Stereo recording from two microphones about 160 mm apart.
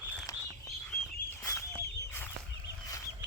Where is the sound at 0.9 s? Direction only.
15° left (ahead or behind).